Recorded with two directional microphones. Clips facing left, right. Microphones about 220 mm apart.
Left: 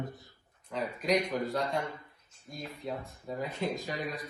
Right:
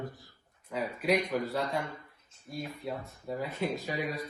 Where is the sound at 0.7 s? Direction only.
5° right (ahead or behind).